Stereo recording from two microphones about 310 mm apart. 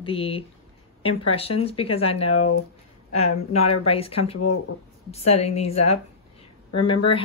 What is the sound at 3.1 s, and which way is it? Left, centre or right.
Speech, centre.